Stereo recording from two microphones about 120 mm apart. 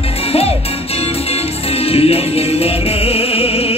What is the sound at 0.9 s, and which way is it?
Music, 55° left (ahead or behind).